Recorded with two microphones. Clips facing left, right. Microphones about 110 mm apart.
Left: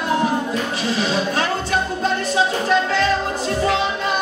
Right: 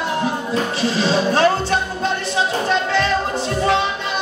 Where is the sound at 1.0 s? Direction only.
30° right (ahead or behind).